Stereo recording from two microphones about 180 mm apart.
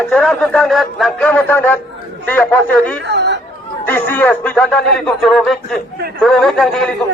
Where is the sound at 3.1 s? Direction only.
75° right (ahead or behind).